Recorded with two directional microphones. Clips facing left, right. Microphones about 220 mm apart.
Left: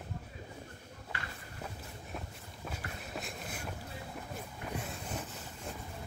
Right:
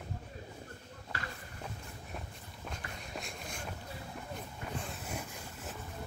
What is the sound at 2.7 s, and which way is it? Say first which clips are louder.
Walk: left 1 dB; 5° left (ahead or behind).